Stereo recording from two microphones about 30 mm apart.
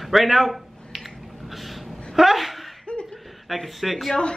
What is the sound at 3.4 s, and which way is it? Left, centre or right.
Speech, centre.